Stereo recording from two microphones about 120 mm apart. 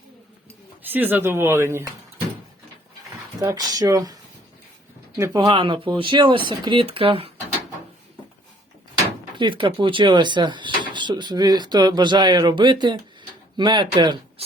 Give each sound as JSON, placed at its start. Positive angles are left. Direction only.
{"t": 0.8, "sound": "speech", "side_deg": -15}
{"t": 3.4, "sound": "speech", "side_deg": -30}
{"t": 5.5, "sound": "speech", "side_deg": -45}
{"t": 9.4, "sound": "speech", "side_deg": -45}